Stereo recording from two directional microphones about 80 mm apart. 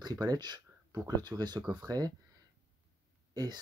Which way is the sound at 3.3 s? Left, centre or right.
Right.